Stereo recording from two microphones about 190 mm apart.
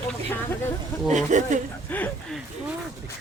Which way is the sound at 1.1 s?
40° right (ahead or behind).